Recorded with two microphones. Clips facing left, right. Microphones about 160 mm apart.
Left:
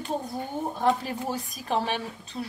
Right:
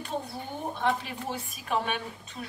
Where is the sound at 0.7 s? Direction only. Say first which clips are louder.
Left 4 dB; 40° left (ahead or behind).